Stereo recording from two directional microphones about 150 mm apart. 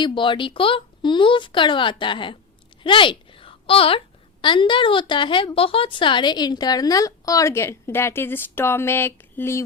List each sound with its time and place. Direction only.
0.0 s a woman's voice: 35° left (ahead or behind); by 9.6 s 15° left (ahead or behind)